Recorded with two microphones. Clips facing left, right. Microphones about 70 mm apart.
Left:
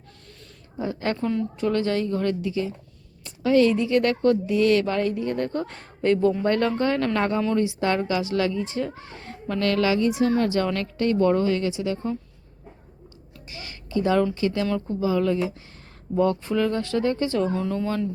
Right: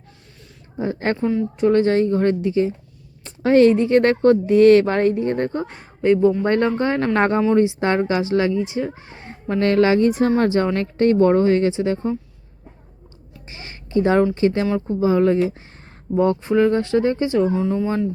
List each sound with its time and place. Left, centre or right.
0.8 s a woman's voice: right
5.5 s speech: centre
7.2 s a woman's voice: right
7.5 s a woman's voice: right
13.5 s a sound: right
14.3 s a woman's voice: right
17.5 s speech: centre